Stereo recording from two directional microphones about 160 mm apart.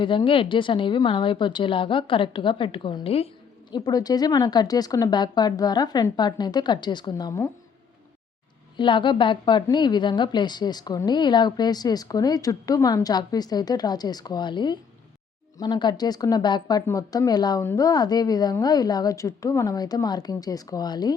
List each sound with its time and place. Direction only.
0.0 s a woman's voice: 30° left (ahead or behind)
3.7 s a woman's voice: 25° left (ahead or behind)
8.8 s a woman's voice: 30° left (ahead or behind)